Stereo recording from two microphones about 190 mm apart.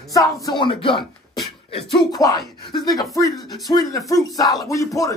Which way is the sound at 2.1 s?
20° left (ahead or behind).